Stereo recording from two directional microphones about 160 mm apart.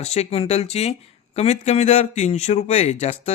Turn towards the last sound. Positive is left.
turn(degrees=45)  # may be behind; listen again after turning